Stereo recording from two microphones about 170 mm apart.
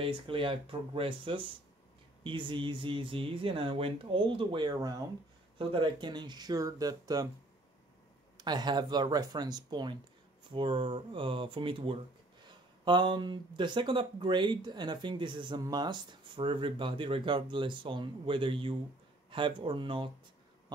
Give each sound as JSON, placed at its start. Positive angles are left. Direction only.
{"t": 0.0, "sound": "speech", "side_deg": -30}
{"t": 8.4, "sound": "speech", "side_deg": -25}